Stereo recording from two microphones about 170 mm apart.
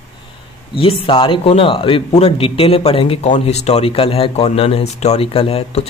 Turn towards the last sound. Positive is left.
turn(degrees=35)  # may be behind; listen again after turning